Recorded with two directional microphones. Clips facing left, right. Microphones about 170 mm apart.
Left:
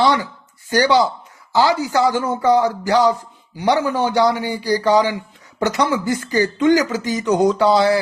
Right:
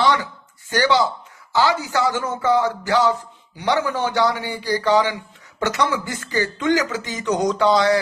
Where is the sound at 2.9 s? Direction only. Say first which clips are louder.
Left 3 dB; 15° left (ahead or behind).